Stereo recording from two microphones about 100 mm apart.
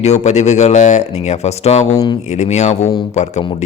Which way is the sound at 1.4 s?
90° left.